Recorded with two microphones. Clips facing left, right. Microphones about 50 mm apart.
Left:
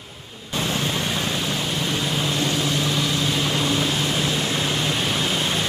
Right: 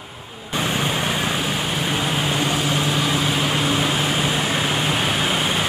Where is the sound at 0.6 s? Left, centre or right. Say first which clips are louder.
Right 2 dB; right.